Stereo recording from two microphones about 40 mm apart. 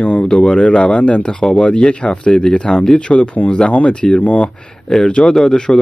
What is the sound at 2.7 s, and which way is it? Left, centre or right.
Speech, centre.